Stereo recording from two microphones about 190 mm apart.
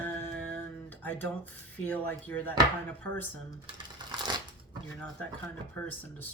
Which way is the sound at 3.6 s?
25° right (ahead or behind).